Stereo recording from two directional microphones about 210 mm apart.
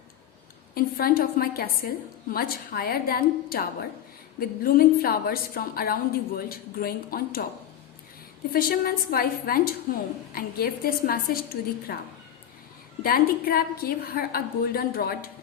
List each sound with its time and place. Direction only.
0.7 s a woman's voice: 45° left (ahead or behind)
8.5 s a woman's voice: 45° left (ahead or behind)